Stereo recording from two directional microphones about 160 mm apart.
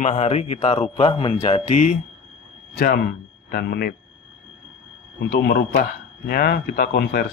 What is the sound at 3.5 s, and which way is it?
Speech, 80° left.